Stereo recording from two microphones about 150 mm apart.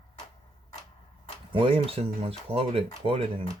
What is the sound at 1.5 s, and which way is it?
Speech, 35° right (ahead or behind).